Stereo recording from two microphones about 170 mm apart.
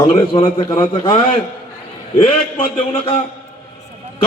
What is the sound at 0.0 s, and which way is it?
A man's voice, 25° left (ahead or behind).